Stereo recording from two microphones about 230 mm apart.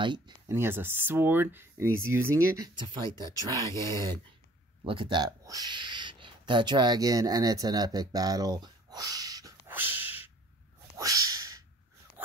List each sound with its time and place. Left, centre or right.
0.0 s speech: centre
4.8 s speech: right
11.0 s a sound: centre